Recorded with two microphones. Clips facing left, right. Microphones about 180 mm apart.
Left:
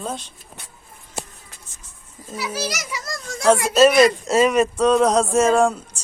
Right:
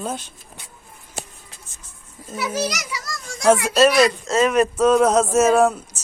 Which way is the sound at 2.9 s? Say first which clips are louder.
Left 2 dB; 50° left (ahead or behind).